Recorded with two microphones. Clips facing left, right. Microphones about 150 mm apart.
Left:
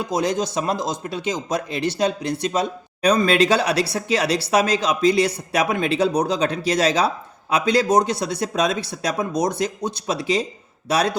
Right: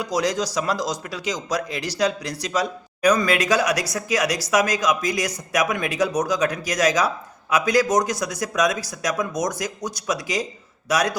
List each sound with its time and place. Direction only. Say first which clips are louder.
0.0 s speech: left 1 dB; 25° left (ahead or behind)